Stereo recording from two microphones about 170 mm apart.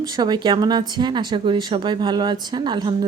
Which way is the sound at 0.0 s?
25° right (ahead or behind).